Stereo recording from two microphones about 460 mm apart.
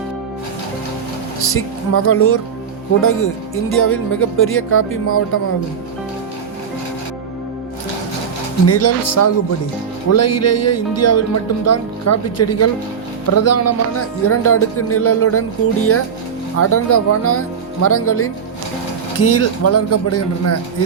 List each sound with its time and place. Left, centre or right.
1.4 s speech: left
8.6 s speech: left